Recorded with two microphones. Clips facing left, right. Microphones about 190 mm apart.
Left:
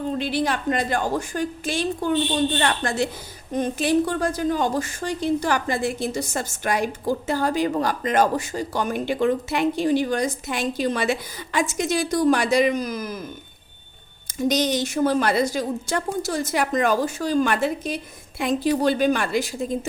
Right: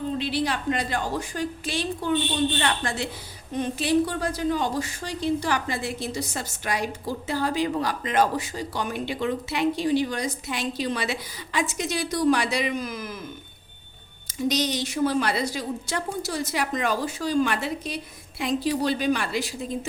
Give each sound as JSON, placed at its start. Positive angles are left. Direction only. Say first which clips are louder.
{"t": 0.2, "sound": "a woman's voice", "louder": "left 3 dB", "side_deg": 50}
{"t": 14.3, "sound": "a woman's voice", "louder": "left 4 dB", "side_deg": 50}